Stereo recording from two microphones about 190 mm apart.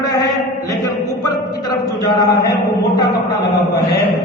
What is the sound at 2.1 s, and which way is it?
Speech, 20° left (ahead or behind).